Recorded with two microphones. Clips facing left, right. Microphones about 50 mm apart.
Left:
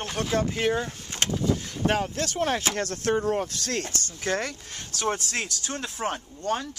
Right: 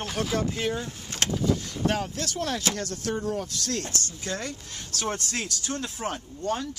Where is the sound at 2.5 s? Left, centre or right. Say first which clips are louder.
Left 2 dB; left.